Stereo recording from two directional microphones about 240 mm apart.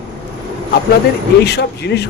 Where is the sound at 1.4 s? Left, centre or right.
Left.